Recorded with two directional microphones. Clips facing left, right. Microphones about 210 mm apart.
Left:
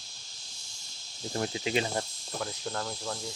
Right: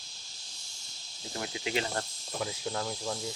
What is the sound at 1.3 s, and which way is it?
Cricket, 40° left (ahead or behind).